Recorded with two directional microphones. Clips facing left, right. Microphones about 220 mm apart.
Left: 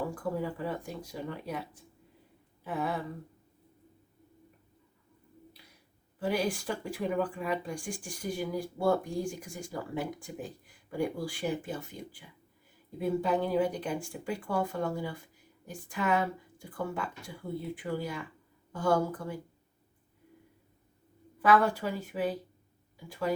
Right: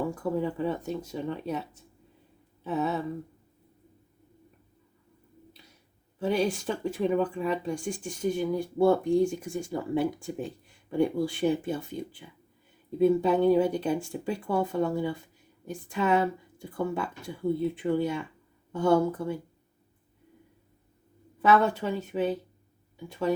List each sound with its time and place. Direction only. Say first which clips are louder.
0.1 s speech: right 5 dB; 25° right (ahead or behind)
6.1 s speech: right 4 dB; 25° right (ahead or behind)
21.4 s speech: right 2 dB; 25° right (ahead or behind)